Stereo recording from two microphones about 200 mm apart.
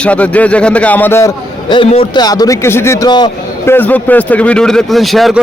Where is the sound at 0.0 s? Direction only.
5° left (ahead or behind).